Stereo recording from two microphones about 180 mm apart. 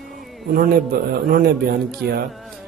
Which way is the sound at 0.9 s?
55° right (ahead or behind).